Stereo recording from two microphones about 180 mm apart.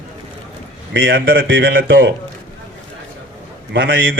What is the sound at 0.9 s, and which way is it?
A man's voice, 90° right.